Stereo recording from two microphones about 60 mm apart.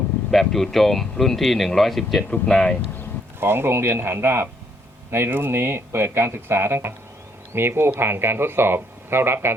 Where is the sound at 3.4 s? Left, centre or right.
Right.